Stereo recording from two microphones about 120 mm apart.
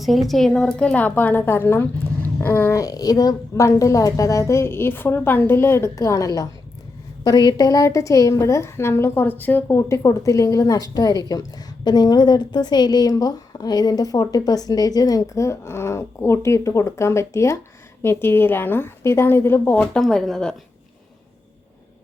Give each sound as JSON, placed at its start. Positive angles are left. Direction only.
{"t": 0.0, "sound": "a woman's voice", "side_deg": 0}
{"t": 19.8, "sound": "speech", "side_deg": 5}